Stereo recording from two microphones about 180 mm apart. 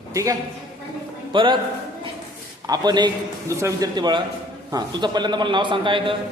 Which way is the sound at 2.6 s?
20° right (ahead or behind).